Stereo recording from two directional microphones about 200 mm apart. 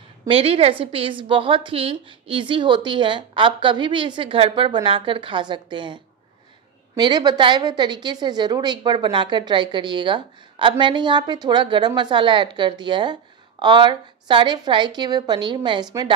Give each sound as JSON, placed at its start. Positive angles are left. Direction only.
{"t": 0.3, "sound": "a woman's voice", "side_deg": -30}
{"t": 7.0, "sound": "a woman's voice", "side_deg": -20}